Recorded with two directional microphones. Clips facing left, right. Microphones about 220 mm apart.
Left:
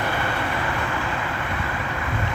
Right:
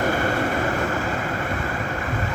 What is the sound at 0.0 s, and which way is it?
Vehicle, 45° right (ahead or behind).